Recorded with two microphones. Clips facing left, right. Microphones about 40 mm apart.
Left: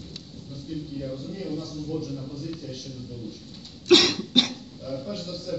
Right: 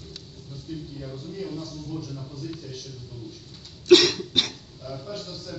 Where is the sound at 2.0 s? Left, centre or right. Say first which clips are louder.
Left 3 dB; left.